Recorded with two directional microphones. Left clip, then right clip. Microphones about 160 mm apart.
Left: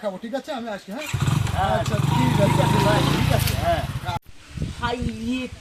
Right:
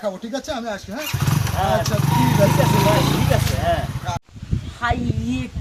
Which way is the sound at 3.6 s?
10° right (ahead or behind).